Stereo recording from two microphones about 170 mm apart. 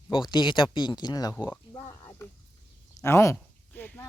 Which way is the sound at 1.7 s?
20° left (ahead or behind).